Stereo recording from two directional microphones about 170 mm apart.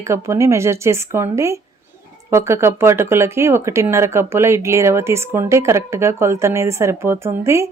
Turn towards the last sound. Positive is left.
turn(degrees=-15)  # may be behind; listen again after turning